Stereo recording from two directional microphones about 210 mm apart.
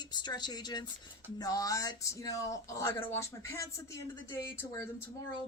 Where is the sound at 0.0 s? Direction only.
20° left (ahead or behind).